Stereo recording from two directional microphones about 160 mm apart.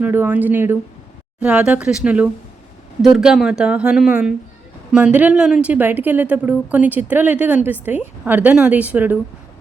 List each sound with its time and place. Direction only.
0.0 s a woman's voice: 10° right (ahead or behind)